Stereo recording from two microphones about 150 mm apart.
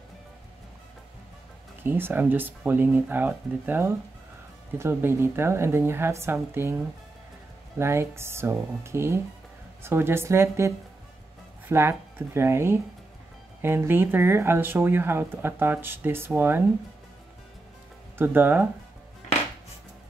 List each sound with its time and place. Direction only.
1.8 s speech: 15° right (ahead or behind)
7.8 s speech: 15° right (ahead or behind)
11.7 s speech: 20° right (ahead or behind)
18.1 s speech: 15° right (ahead or behind)